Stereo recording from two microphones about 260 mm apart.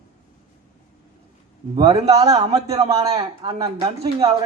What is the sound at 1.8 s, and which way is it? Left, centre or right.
Speech, centre.